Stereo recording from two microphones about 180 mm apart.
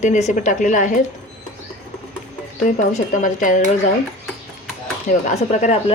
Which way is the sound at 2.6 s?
45° left (ahead or behind).